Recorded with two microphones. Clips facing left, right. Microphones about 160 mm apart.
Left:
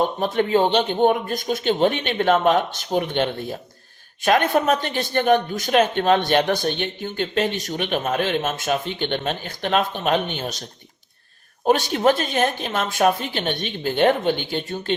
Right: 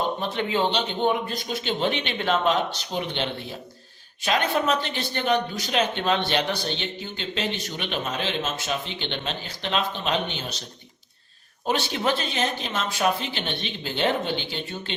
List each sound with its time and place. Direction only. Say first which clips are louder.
0.2 s speech: left 6 dB; 45° left (ahead or behind)
11.6 s speech: left 7 dB; 45° left (ahead or behind)